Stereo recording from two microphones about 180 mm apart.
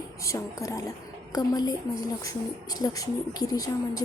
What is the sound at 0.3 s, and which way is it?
A woman's voice, 15° left (ahead or behind).